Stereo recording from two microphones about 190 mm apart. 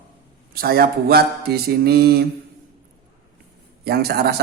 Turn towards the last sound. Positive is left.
turn(degrees=-55)  # may be behind; listen again after turning